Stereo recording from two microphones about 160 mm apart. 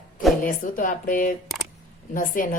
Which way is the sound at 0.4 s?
55° left (ahead or behind).